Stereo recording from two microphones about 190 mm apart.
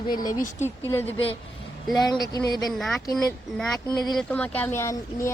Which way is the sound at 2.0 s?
20° left (ahead or behind).